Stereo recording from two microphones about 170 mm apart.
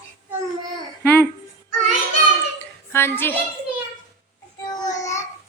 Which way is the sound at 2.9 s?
15° left (ahead or behind).